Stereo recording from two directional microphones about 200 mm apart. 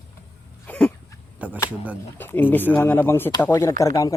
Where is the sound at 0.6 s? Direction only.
5° left (ahead or behind).